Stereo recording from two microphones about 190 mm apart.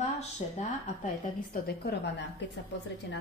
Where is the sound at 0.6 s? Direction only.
40° left (ahead or behind).